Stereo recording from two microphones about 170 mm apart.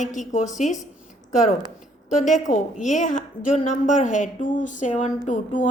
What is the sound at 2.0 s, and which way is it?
A woman's voice, 50° left (ahead or behind).